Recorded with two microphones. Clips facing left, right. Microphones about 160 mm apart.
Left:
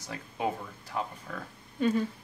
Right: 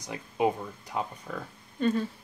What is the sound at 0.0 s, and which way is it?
Speech, 20° right (ahead or behind).